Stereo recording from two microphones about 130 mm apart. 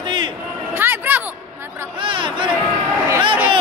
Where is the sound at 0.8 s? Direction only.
15° right (ahead or behind).